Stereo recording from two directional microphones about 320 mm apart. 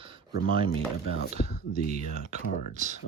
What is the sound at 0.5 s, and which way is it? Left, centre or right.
Speech, centre.